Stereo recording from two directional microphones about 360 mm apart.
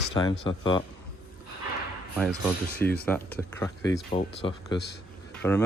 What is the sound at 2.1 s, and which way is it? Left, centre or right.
Speech, centre.